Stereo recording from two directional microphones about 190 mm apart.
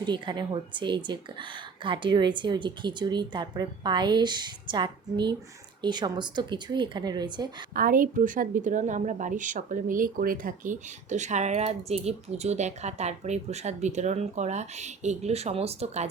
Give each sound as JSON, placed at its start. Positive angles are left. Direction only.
{"t": 0.0, "sound": "speech", "side_deg": -25}
{"t": 7.7, "sound": "a woman's voice", "side_deg": -45}